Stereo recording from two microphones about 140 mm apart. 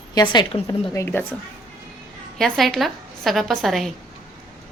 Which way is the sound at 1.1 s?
15° left (ahead or behind).